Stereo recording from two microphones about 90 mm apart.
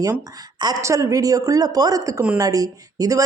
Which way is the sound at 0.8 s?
35° right (ahead or behind).